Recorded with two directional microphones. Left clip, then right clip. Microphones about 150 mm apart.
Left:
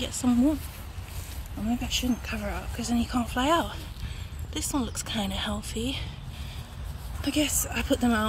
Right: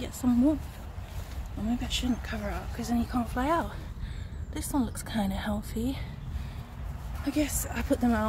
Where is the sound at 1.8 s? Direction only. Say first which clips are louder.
Left 3 dB; 30° left (ahead or behind); by 5.8 s 10° left (ahead or behind).